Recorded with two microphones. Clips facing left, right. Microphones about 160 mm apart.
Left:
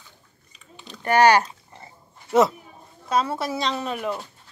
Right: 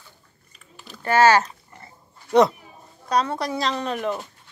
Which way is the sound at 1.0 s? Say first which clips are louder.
Even; 15° left (ahead or behind).